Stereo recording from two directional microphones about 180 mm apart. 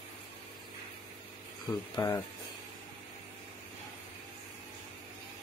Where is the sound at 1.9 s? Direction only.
15° left (ahead or behind).